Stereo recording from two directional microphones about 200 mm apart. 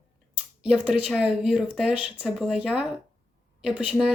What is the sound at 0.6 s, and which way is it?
Speech, 5° right (ahead or behind).